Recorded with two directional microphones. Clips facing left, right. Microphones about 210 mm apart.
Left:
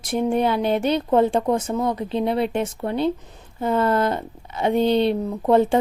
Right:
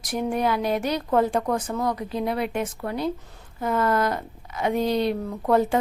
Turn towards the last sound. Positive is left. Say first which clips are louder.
# left 4 dB
turn(degrees=25)  # may be behind; listen again after turning